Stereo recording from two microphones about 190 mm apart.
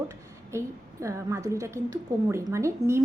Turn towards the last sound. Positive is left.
turn(degrees=-15)  # may be behind; listen again after turning